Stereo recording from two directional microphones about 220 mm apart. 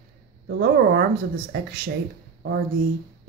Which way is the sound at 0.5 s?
45° right (ahead or behind).